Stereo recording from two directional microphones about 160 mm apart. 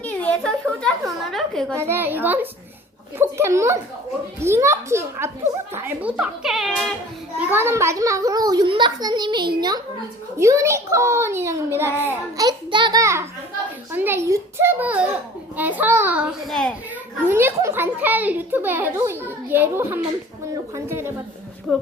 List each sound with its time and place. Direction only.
0.0 s a sound: 10° left (ahead or behind)
1.7 s a child's voice: 15° right (ahead or behind)
7.5 s a child's voice: 15° right (ahead or behind)
12.4 s a child's voice: 25° right (ahead or behind)
21.7 s speech: centre (ahead or behind)